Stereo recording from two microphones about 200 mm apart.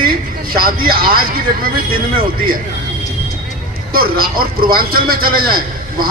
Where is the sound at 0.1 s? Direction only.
45° right (ahead or behind).